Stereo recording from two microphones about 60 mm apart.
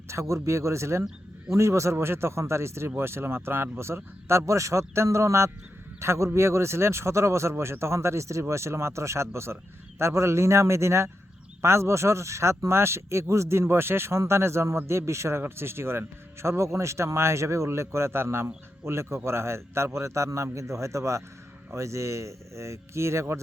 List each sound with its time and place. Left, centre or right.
0.1 s a man's voice: right